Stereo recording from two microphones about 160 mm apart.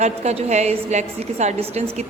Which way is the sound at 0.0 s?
45° right (ahead or behind).